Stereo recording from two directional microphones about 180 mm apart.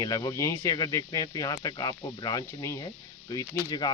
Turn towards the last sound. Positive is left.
turn(degrees=20)  # may be behind; listen again after turning